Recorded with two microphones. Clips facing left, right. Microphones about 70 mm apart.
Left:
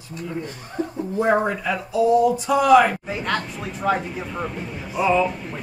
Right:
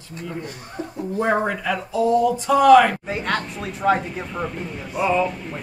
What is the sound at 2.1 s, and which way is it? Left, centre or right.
Speech, left.